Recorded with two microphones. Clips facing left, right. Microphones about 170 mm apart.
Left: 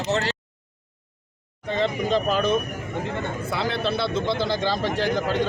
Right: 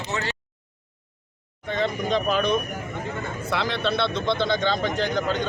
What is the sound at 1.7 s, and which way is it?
Speech, 30° left (ahead or behind).